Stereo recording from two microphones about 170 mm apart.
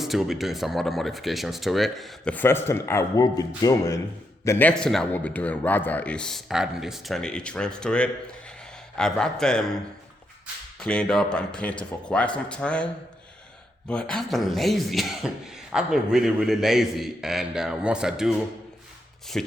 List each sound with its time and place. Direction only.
0.0 s speech: centre (ahead or behind)
19.3 s speech: 5° left (ahead or behind)